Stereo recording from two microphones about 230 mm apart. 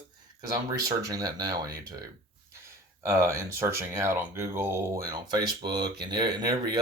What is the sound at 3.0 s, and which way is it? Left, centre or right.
Speech, centre.